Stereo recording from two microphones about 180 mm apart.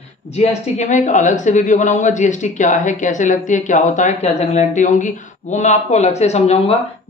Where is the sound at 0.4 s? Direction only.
40° left (ahead or behind).